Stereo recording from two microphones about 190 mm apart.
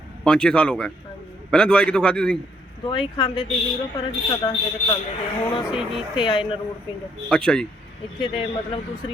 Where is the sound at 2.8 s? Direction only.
25° left (ahead or behind).